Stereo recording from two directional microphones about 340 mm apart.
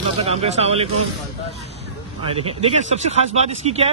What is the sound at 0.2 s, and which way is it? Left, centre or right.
Speech, centre.